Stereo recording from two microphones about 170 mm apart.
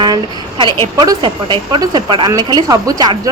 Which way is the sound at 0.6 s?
25° right (ahead or behind).